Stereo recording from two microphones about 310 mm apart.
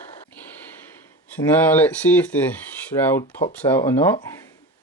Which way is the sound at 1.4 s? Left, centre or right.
Centre.